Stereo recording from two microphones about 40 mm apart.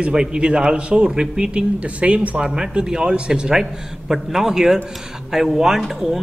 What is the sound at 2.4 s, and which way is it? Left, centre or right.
A man's voice, centre.